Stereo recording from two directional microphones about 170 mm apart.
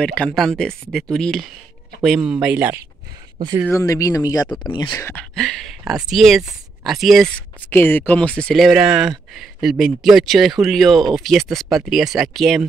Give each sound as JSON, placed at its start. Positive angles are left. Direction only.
{"t": 0.0, "sound": "speech", "side_deg": 5}
{"t": 3.7, "sound": "speech", "side_deg": 20}
{"t": 4.9, "sound": "speech", "side_deg": 10}